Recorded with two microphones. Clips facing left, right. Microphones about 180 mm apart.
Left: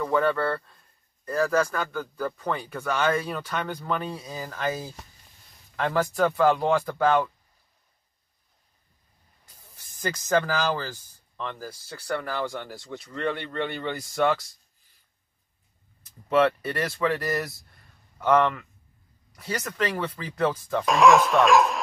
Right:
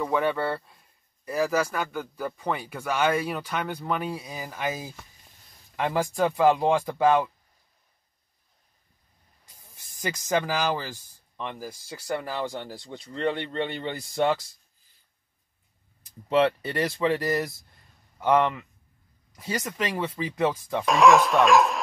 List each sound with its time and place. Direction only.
0.0 s speech: 5° right (ahead or behind)
10.0 s speech: 15° right (ahead or behind)
16.3 s speech: 25° right (ahead or behind)
20.8 s speech: centre (ahead or behind)